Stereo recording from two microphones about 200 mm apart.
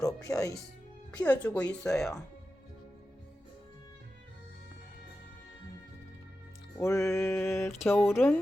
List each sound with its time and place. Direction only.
0.0 s music: 15° left (ahead or behind)
1.2 s speech: 5° left (ahead or behind)
6.7 s speech: 15° left (ahead or behind)